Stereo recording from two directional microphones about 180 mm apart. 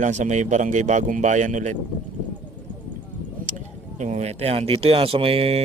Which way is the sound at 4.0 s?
40° right (ahead or behind).